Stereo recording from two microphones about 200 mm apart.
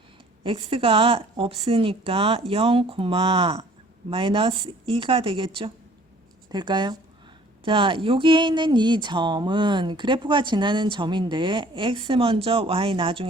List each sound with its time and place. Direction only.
0.4 s speech: 25° right (ahead or behind)